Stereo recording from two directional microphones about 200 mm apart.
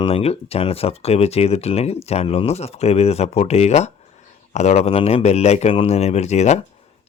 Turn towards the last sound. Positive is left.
turn(degrees=35)  # may be behind; listen again after turning